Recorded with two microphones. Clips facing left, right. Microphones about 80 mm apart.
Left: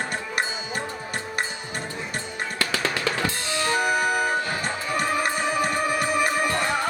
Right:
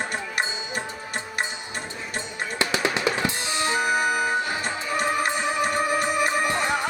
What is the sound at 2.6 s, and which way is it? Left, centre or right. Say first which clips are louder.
Drum: right 2 dB; right.